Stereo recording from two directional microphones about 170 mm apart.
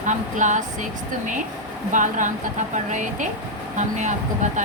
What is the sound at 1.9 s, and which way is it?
A woman's voice, 50° right (ahead or behind).